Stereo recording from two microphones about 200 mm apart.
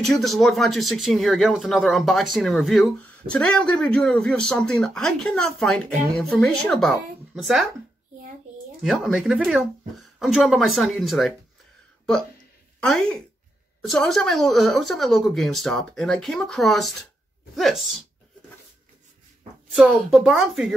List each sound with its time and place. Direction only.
0.0 s speech: centre (ahead or behind)
8.8 s speech: centre (ahead or behind)
12.8 s speech: 5° left (ahead or behind)
19.7 s speech: centre (ahead or behind)